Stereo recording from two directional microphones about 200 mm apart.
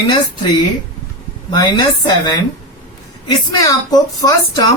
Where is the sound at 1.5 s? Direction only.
20° left (ahead or behind).